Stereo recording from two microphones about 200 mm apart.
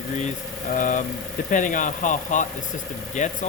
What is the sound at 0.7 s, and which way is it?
Speech, 40° left (ahead or behind).